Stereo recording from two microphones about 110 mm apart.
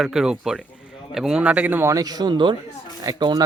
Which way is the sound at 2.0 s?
35° right (ahead or behind).